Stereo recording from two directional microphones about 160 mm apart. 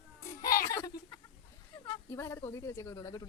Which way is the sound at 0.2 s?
55° left (ahead or behind).